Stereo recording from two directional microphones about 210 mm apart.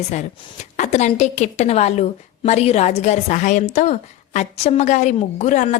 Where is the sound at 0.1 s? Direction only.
35° left (ahead or behind).